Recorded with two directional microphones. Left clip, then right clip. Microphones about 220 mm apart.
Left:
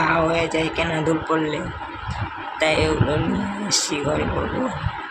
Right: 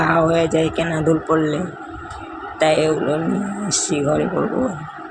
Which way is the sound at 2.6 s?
15° right (ahead or behind).